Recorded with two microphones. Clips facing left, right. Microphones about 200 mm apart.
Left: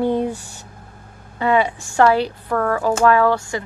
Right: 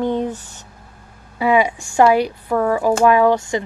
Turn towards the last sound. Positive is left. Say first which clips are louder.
# right 2 dB
turn(degrees=-20)  # may be behind; listen again after turning